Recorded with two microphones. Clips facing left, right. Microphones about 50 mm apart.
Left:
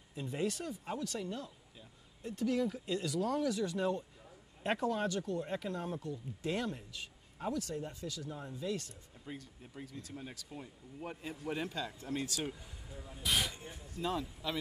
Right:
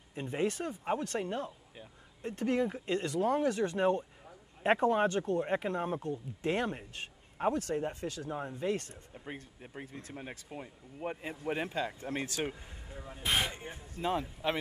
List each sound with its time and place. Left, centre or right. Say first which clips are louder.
0.1 s speech: right 4 dB; right